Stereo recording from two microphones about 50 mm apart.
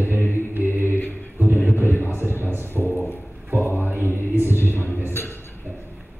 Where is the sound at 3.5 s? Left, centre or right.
Right.